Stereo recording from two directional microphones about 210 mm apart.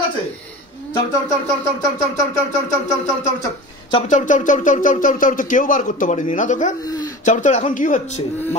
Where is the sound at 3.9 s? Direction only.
30° left (ahead or behind).